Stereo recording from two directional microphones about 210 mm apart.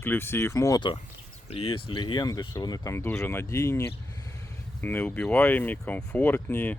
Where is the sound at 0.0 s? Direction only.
10° left (ahead or behind).